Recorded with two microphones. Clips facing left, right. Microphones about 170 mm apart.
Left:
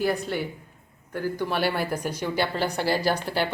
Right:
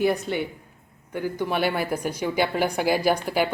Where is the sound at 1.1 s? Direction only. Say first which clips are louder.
Right 1 dB; 15° right (ahead or behind).